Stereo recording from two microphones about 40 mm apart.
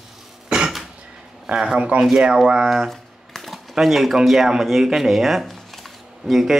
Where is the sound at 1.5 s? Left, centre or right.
Centre.